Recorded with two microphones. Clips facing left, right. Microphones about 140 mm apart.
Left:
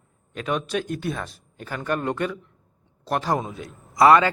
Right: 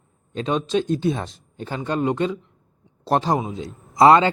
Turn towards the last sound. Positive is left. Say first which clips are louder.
# right 2 dB
turn(degrees=-25)  # may be behind; listen again after turning